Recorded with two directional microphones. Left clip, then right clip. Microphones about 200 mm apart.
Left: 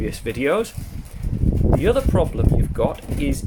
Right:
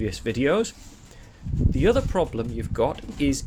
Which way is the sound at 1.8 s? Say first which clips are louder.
Even; 25° right (ahead or behind).